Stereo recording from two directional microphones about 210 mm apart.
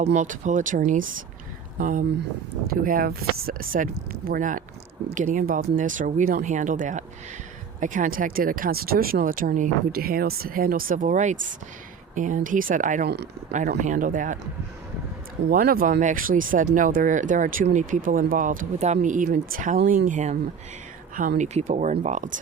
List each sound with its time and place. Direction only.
0.0 s speech: 35° right (ahead or behind)
15.4 s speech: 45° right (ahead or behind)